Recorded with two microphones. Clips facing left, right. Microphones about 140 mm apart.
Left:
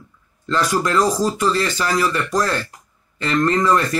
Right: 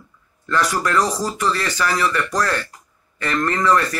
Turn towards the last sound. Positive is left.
turn(degrees=20)  # may be behind; listen again after turning